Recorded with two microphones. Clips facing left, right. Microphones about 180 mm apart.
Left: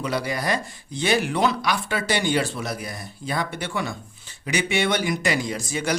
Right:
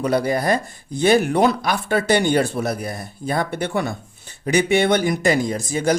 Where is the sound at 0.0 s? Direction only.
50° right (ahead or behind).